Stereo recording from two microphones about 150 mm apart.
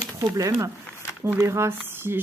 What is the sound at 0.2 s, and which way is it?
Speech, 25° right (ahead or behind).